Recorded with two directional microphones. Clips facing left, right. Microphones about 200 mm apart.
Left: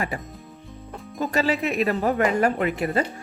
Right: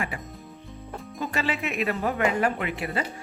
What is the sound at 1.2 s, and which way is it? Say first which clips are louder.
Speech: left 6 dB; 40° left (ahead or behind).